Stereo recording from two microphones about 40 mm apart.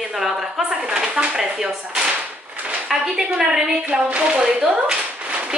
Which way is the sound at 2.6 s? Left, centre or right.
Right.